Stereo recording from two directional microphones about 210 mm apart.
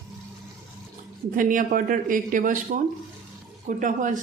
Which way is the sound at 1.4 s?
40° right (ahead or behind).